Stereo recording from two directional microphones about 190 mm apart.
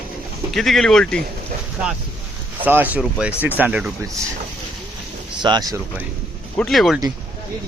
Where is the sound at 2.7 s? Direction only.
10° right (ahead or behind).